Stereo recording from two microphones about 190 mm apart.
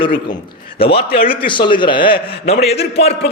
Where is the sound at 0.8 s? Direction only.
30° left (ahead or behind).